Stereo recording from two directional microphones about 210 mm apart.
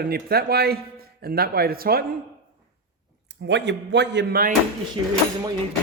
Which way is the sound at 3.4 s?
55° right (ahead or behind).